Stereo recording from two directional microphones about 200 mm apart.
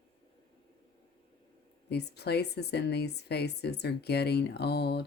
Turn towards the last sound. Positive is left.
turn(degrees=55)  # may be behind; listen again after turning